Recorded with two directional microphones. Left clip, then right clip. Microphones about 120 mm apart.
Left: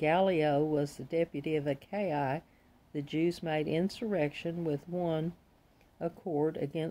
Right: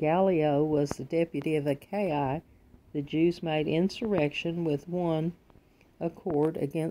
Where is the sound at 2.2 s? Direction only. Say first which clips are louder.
Right 3 dB; 10° right (ahead or behind).